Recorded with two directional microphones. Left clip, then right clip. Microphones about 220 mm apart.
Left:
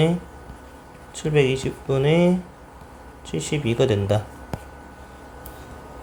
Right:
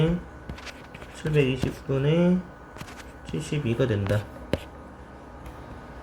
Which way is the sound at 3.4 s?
15° left (ahead or behind).